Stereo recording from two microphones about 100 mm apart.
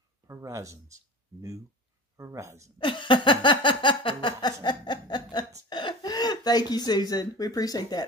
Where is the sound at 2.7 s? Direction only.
55° left (ahead or behind).